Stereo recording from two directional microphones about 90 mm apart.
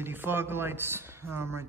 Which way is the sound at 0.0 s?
25° right (ahead or behind).